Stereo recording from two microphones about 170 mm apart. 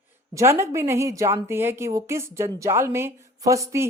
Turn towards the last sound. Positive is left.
turn(degrees=-20)  # may be behind; listen again after turning